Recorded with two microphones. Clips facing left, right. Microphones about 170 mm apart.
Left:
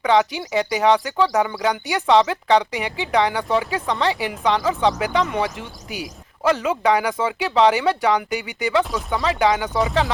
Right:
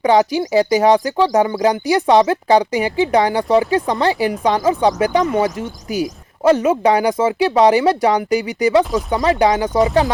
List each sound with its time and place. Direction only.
0.0 s speech: 35° right (ahead or behind)
6.4 s speech: 25° right (ahead or behind)
8.8 s speech: centre (ahead or behind)
9.0 s speech: 35° right (ahead or behind)